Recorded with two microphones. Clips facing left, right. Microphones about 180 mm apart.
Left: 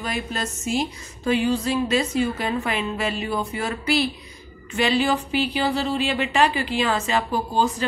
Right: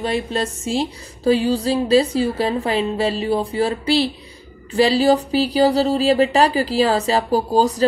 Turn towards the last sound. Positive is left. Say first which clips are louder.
# right 6 dB
turn(degrees=-40)  # may be behind; listen again after turning